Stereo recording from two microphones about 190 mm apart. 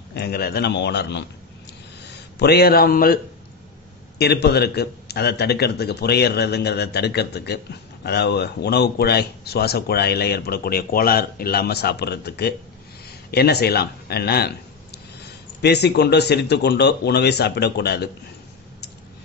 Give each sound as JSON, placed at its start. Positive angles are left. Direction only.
{"t": 0.1, "sound": "a man's voice", "side_deg": 55}
{"t": 4.2, "sound": "speech", "side_deg": 60}